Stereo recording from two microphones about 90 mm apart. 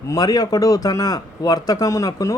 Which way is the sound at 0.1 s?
45° left (ahead or behind).